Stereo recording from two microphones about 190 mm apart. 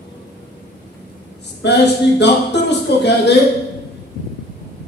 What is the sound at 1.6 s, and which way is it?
A man's voice, 65° left (ahead or behind).